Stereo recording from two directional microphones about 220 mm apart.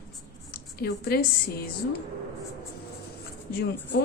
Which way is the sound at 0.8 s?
45° left (ahead or behind).